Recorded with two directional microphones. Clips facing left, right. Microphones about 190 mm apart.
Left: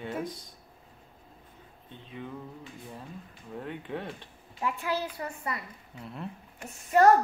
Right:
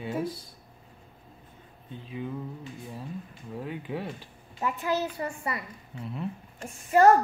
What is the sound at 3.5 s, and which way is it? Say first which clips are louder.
A child's voice: right 2 dB; 5° right (ahead or behind).